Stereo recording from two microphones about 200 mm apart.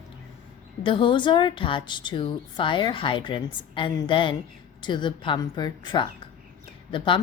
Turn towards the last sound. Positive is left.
turn(degrees=25)  # may be behind; listen again after turning